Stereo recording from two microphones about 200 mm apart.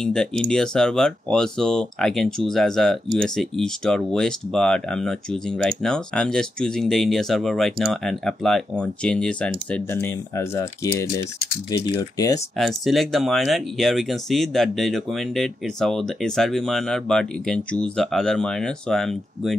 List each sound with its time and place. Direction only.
0.0 s speech: 5° left (ahead or behind)
12.5 s speech: centre (ahead or behind)